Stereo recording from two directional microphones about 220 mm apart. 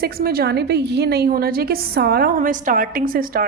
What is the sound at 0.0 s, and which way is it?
Speech, 45° right (ahead or behind).